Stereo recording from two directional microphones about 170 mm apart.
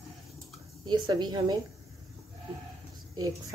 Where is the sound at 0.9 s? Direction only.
25° right (ahead or behind).